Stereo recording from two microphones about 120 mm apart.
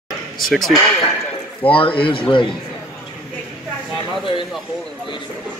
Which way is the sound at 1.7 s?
50° left (ahead or behind).